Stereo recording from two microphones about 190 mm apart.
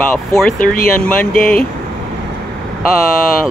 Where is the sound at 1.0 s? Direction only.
5° left (ahead or behind).